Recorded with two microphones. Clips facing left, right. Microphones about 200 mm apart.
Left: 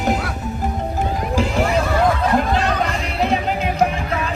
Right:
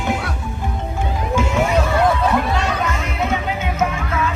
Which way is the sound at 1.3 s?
35° left (ahead or behind).